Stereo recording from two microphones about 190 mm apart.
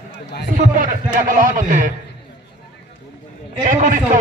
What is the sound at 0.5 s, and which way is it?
A man's voice, 45° right (ahead or behind).